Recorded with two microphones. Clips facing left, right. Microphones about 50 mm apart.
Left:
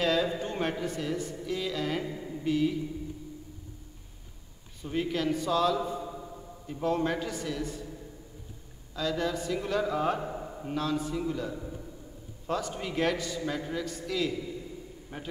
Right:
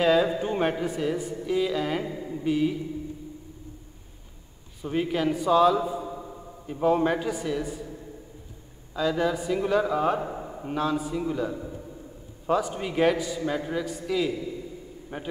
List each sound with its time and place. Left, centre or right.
0.0 s a man's voice: centre
4.8 s a man's voice: centre
8.9 s a man's voice: centre